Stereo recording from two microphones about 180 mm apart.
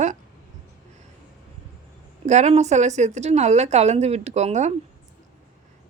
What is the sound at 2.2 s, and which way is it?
Speech, 40° right (ahead or behind).